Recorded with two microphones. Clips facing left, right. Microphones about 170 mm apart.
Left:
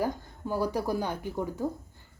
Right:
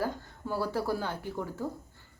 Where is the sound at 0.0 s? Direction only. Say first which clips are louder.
Left 3 dB; 15° left (ahead or behind).